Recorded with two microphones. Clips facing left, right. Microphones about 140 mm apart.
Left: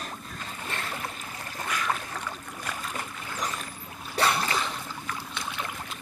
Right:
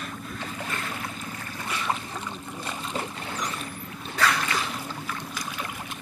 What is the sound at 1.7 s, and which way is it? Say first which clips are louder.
Boat: right 1 dB; 25° right (ahead or behind).